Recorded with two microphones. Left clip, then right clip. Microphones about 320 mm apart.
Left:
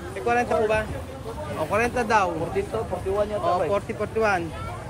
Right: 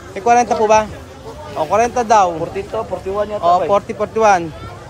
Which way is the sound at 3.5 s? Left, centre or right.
Centre.